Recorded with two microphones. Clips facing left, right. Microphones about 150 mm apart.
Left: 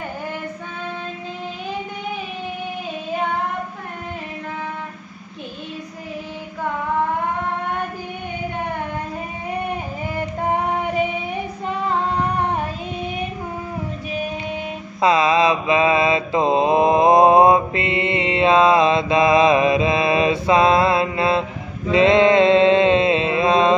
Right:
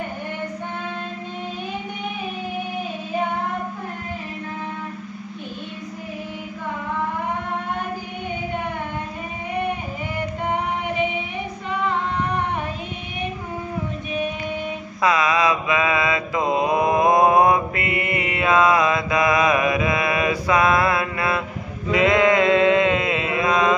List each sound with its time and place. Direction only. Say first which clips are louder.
15.0 s mantra: left 4 dB; 25° left (ahead or behind)